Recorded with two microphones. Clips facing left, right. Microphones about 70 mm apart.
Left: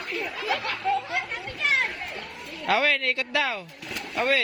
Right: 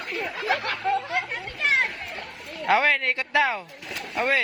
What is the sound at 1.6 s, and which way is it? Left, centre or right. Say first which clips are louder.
Children playing: right 2 dB; right.